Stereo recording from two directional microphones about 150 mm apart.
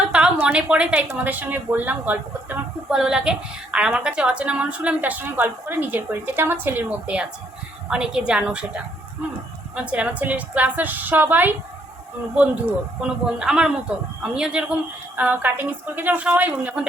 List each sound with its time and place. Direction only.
0.1 s a sound: 5° right (ahead or behind)
1.0 s speech: 10° right (ahead or behind)
9.7 s speech: 10° right (ahead or behind)